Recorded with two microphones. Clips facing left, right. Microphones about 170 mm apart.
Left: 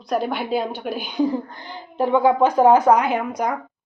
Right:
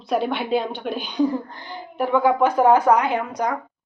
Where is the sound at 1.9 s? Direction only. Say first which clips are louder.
Left 2 dB; 20° left (ahead or behind).